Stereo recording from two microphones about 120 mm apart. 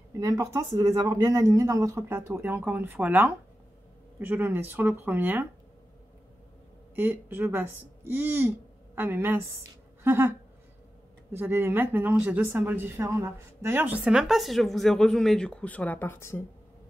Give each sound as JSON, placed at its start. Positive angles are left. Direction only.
{"t": 0.2, "sound": "speech", "side_deg": -25}
{"t": 7.0, "sound": "speech", "side_deg": -15}
{"t": 11.3, "sound": "speech", "side_deg": -20}
{"t": 14.0, "sound": "speech", "side_deg": -5}